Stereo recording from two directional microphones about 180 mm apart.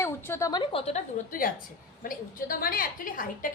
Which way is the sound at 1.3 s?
55° left (ahead or behind).